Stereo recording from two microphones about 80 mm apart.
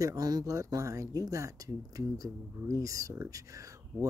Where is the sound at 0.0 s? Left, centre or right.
Right.